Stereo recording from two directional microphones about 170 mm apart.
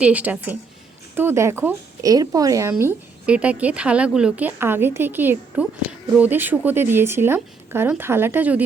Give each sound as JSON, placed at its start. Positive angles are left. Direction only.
{"t": 0.0, "sound": "speech", "side_deg": -10}